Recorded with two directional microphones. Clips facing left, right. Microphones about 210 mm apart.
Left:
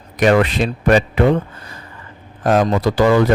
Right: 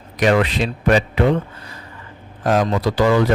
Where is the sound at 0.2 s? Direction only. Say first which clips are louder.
Left 3 dB; 50° left (ahead or behind).